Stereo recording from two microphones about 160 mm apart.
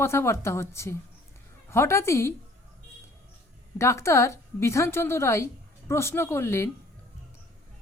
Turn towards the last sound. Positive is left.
turn(degrees=15)  # may be behind; listen again after turning